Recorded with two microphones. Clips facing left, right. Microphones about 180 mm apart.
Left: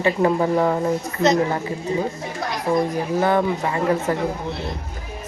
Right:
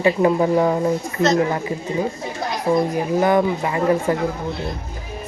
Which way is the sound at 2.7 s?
10° right (ahead or behind).